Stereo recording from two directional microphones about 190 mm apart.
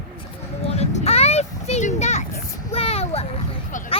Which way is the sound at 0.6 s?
35° left (ahead or behind).